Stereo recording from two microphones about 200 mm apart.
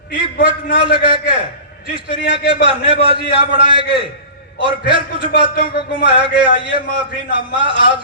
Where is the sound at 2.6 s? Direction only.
25° right (ahead or behind).